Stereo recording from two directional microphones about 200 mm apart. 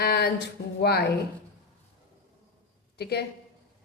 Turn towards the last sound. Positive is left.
turn(degrees=55)  # may be behind; listen again after turning